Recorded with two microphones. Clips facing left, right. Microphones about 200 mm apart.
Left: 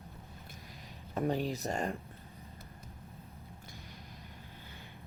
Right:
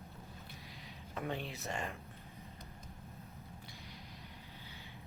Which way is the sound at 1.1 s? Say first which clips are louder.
Left 8 dB; 40° left (ahead or behind).